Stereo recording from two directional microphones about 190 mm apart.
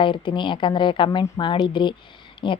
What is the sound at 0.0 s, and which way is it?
A woman's voice, 25° left (ahead or behind).